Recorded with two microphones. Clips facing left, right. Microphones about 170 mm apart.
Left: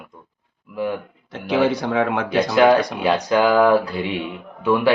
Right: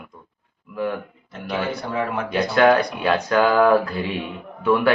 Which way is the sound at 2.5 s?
15° left (ahead or behind).